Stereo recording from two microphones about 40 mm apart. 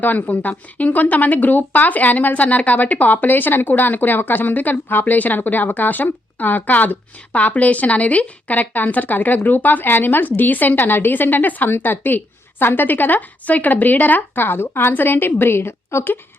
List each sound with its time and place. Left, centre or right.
0.0 s a woman's voice: left